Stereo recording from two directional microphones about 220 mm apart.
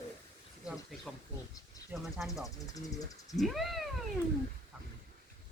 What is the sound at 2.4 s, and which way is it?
Speech, 15° left (ahead or behind).